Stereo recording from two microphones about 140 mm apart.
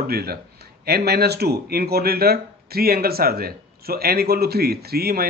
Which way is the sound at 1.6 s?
90° right.